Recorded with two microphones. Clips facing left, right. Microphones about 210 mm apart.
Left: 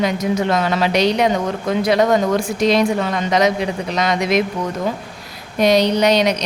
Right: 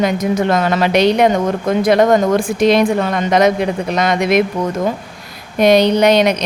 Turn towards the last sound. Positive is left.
turn(degrees=-55)  # may be behind; listen again after turning